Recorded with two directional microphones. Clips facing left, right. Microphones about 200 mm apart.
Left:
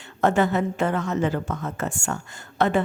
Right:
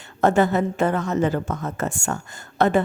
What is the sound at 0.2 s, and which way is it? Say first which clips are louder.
A woman's voice: right 2 dB; 40° right (ahead or behind).